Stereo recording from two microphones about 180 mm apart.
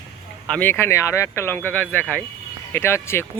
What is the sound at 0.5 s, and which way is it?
Speech, 10° left (ahead or behind).